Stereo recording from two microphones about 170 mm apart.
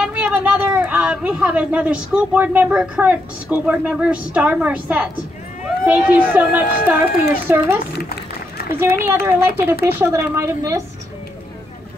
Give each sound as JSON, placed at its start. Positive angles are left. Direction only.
{"t": 0.0, "sound": "a woman's voice", "side_deg": -5}